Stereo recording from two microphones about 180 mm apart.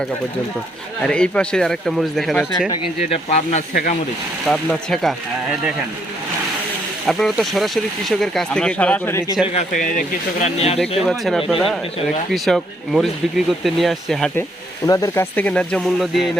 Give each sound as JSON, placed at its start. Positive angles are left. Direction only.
{"t": 1.0, "sound": "speech", "side_deg": 5}
{"t": 3.0, "sound": "speech", "side_deg": 35}
{"t": 4.4, "sound": "speech", "side_deg": 0}
{"t": 7.1, "sound": "speech", "side_deg": 0}
{"t": 9.6, "sound": "speech", "side_deg": 45}
{"t": 10.4, "sound": "speech", "side_deg": 35}
{"t": 11.0, "sound": "speech", "side_deg": 0}
{"t": 14.8, "sound": "speech", "side_deg": 15}